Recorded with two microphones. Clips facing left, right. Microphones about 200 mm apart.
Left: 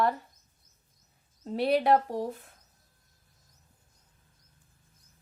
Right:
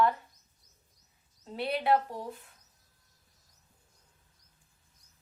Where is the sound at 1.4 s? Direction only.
40° left (ahead or behind).